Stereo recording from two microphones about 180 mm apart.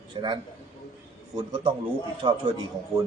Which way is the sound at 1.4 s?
25° right (ahead or behind).